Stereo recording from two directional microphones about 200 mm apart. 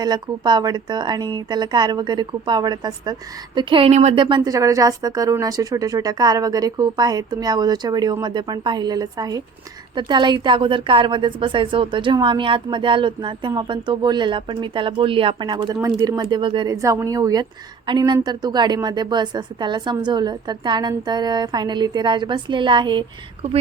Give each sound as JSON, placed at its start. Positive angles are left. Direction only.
{"t": 0.0, "sound": "a woman's voice", "side_deg": -20}